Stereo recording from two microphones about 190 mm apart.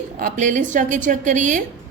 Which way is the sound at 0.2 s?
45° right (ahead or behind).